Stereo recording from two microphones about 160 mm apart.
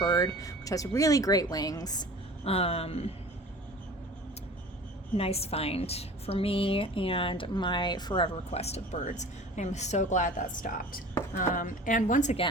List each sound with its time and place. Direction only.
0.3 s a woman's voice: 20° left (ahead or behind)
2.4 s a woman's voice: 40° left (ahead or behind)
5.1 s a woman's voice: 40° left (ahead or behind)